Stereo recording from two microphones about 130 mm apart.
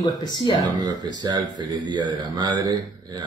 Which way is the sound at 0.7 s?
35° right (ahead or behind).